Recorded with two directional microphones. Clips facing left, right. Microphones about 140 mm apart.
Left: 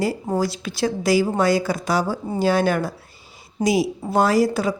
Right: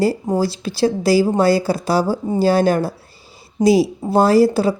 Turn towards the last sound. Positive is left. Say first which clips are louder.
# right 5 dB
turn(degrees=-30)  # may be behind; listen again after turning